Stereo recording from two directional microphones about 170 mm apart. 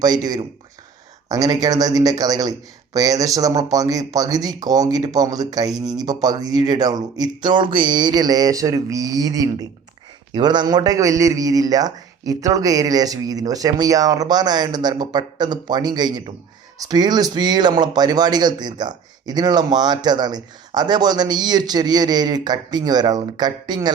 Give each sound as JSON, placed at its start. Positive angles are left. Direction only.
{"t": 0.0, "sound": "speech", "side_deg": -25}